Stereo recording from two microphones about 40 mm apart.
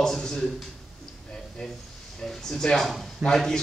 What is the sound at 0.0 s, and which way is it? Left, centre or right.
Speech, centre.